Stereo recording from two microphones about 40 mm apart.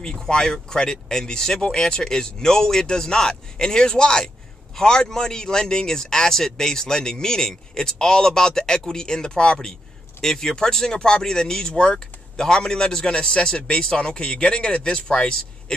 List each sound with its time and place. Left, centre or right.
0.0 s speech: centre